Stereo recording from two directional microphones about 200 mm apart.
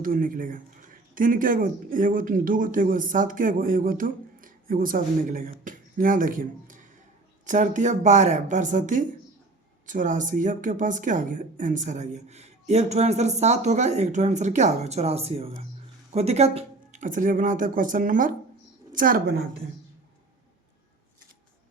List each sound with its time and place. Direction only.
0.0 s a woman's voice: 45° right (ahead or behind)